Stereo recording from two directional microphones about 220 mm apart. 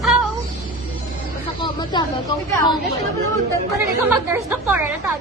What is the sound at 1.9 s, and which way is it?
Speech, 15° left (ahead or behind).